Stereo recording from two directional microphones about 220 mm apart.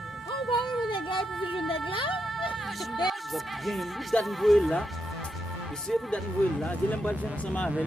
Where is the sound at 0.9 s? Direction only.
20° left (ahead or behind).